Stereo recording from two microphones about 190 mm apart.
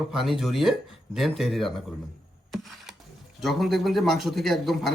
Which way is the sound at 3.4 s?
Centre (ahead or behind).